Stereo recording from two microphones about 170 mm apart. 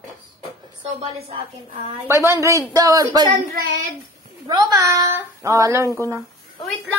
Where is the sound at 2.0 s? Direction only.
15° right (ahead or behind).